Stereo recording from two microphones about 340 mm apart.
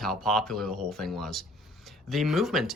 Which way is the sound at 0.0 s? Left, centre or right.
Centre.